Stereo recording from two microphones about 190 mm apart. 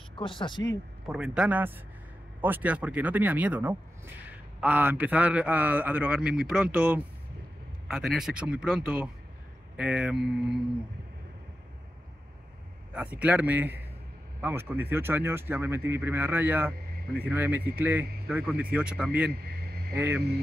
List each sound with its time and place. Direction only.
0.1 s speech: 25° left (ahead or behind)
1.0 s a man's voice: 5° right (ahead or behind)
12.9 s a man's voice: 5° right (ahead or behind)